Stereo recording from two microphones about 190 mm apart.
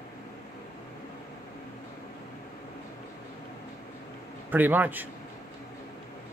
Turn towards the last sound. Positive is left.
turn(degrees=-10)  # may be behind; listen again after turning